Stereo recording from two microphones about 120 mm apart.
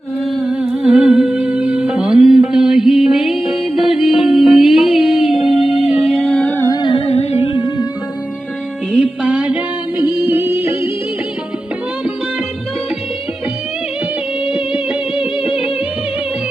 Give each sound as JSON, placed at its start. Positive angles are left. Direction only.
{"t": 0.3, "sound": "music", "side_deg": -5}
{"t": 6.7, "sound": "humming", "side_deg": 35}
{"t": 7.0, "sound": "music", "side_deg": 60}
{"t": 7.5, "sound": "music", "side_deg": 35}
{"t": 9.2, "sound": "a sound", "side_deg": -10}
{"t": 10.2, "sound": "music", "side_deg": -20}
{"t": 14.5, "sound": "music", "side_deg": -10}